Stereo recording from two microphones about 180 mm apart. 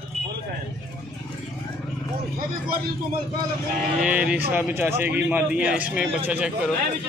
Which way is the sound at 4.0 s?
5° right (ahead or behind).